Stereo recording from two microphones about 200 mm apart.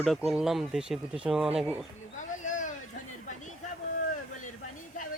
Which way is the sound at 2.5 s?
40° left (ahead or behind).